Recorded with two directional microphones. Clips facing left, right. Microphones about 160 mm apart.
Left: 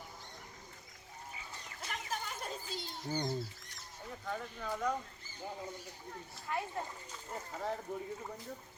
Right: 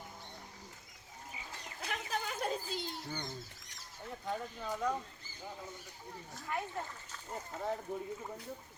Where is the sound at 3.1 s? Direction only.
30° left (ahead or behind).